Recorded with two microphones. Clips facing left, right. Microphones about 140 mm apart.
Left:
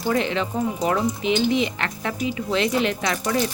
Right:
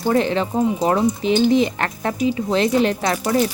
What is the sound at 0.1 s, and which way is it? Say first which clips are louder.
Speech: right 4 dB; 35° right (ahead or behind).